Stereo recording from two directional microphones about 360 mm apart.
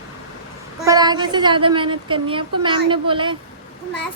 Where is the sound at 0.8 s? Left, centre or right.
Centre.